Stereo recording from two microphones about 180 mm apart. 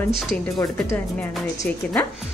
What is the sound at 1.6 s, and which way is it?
Speech, 15° left (ahead or behind).